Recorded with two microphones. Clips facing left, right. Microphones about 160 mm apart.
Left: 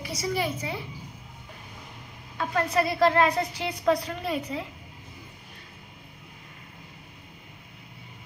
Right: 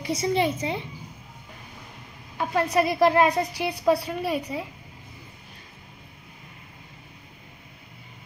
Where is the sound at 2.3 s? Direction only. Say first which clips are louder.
Right 3 dB; 15° right (ahead or behind).